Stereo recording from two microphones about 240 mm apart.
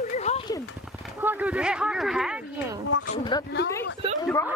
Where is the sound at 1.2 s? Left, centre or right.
Centre.